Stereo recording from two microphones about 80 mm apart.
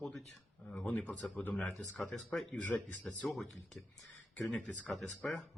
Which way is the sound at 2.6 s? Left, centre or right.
Left.